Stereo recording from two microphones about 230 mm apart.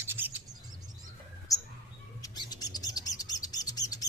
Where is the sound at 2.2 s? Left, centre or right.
Centre.